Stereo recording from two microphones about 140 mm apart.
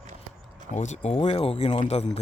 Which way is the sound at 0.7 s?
55° left (ahead or behind).